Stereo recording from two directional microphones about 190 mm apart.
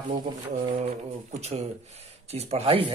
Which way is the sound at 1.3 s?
35° right (ahead or behind).